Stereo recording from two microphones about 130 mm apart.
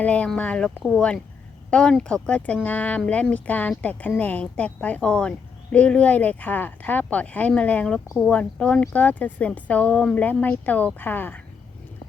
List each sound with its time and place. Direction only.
0.0 s speech: 10° left (ahead or behind)